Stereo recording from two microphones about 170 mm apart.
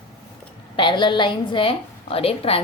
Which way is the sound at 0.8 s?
30° left (ahead or behind).